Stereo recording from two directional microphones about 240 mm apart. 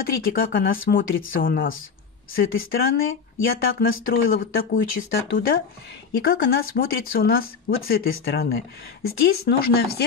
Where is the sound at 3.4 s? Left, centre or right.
Left.